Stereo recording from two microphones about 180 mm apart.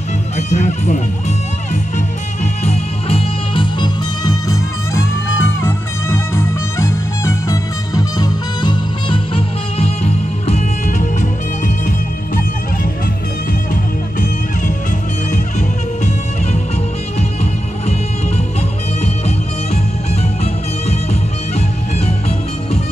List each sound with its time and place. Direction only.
0.4 s speech: 40° left (ahead or behind)
1.7 s music: 40° left (ahead or behind)
18.9 s music: 35° left (ahead or behind)